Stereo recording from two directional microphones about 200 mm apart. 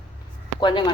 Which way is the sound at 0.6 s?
20° left (ahead or behind).